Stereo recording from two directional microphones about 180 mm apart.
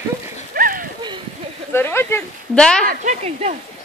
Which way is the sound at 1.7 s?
10° left (ahead or behind).